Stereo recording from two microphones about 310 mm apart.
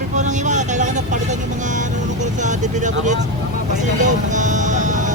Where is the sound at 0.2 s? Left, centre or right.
Right.